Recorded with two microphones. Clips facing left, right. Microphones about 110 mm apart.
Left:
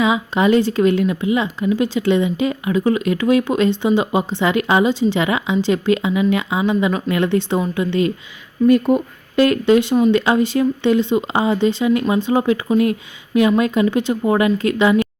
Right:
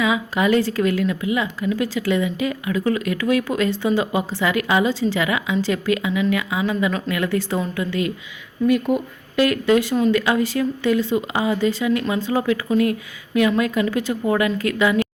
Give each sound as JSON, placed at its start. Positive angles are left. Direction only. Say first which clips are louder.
{"t": 0.0, "sound": "speech", "louder": "left 3 dB", "side_deg": 25}
{"t": 8.6, "sound": "speech", "louder": "left 5 dB", "side_deg": 40}
{"t": 9.3, "sound": "speech", "louder": "left 4 dB", "side_deg": 30}